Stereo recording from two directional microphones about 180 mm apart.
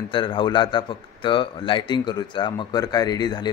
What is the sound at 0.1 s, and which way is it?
Speech, 25° left (ahead or behind).